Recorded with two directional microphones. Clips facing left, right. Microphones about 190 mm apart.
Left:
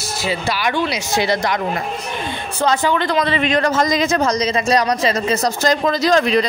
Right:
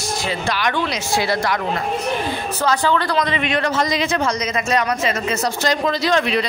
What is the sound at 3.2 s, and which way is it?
Speech, 35° left (ahead or behind).